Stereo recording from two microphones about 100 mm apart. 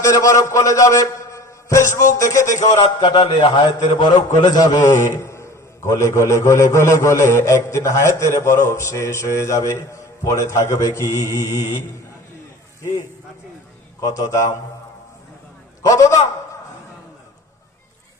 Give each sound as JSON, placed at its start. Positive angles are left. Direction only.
{"t": 0.0, "sound": "a man's voice", "side_deg": 35}
{"t": 3.0, "sound": "a man's voice", "side_deg": 55}
{"t": 14.0, "sound": "a man's voice", "side_deg": 35}
{"t": 15.9, "sound": "a man's voice", "side_deg": 30}